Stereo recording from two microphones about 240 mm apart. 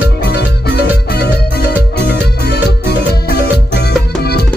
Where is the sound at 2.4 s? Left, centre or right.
Left.